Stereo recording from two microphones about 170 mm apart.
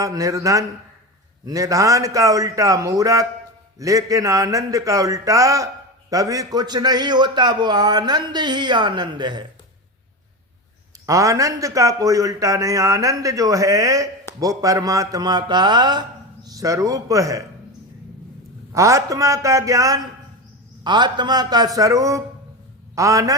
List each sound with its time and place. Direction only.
0.0 s a man's voice: 20° right (ahead or behind)
11.0 s a man's voice: 20° right (ahead or behind)
18.7 s a man's voice: 20° right (ahead or behind)